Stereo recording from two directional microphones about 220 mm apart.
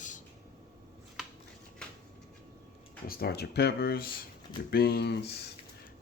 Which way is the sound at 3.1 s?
45° left (ahead or behind).